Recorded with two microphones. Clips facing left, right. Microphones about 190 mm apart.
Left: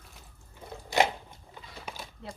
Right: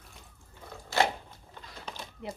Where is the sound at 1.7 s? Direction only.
5° left (ahead or behind).